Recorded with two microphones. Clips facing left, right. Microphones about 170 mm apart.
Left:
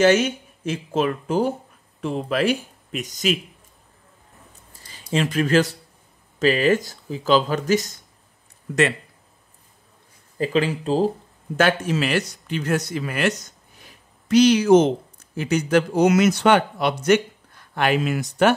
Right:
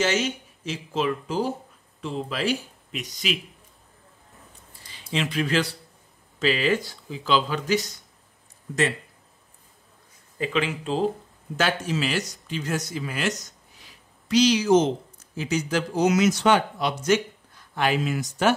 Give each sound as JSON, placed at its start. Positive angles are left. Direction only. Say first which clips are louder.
{"t": 0.0, "sound": "speech", "louder": "left 7 dB", "side_deg": 55}
{"t": 4.9, "sound": "speech", "louder": "left 5 dB", "side_deg": 45}
{"t": 10.3, "sound": "speech", "louder": "left 5 dB", "side_deg": 40}
{"t": 11.5, "sound": "speech", "louder": "left 5 dB", "side_deg": 55}